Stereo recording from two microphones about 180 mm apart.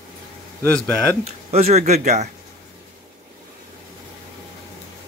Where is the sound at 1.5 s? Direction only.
35° right (ahead or behind).